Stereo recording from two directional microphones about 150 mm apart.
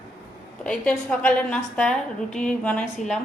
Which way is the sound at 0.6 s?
5° left (ahead or behind).